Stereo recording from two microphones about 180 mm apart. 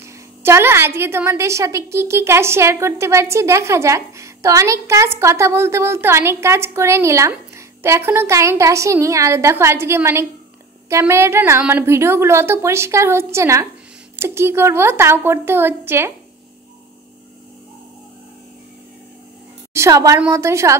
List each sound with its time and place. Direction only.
0.0 s a woman's voice: 15° right (ahead or behind)
19.7 s a woman's voice: 15° right (ahead or behind)